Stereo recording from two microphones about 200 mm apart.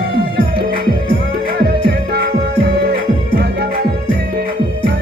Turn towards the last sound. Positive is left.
turn(degrees=-55)  # may be behind; listen again after turning